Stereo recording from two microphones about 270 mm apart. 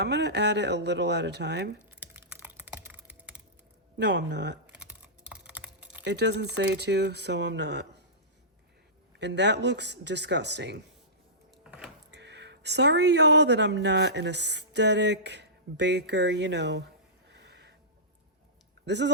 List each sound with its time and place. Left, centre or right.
0.0 s speech: right
2.0 s typing: centre
3.9 s speech: right
5.5 s typing: centre
6.1 s speech: right
9.1 s speech: right
11.5 s power windows: centre
12.1 s speech: right
17.4 s a sound: right
18.9 s speech: right